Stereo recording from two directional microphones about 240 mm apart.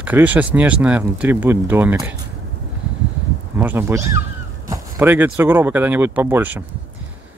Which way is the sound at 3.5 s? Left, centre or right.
Centre.